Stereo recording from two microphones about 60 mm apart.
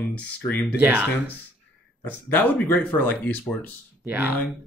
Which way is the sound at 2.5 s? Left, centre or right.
Left.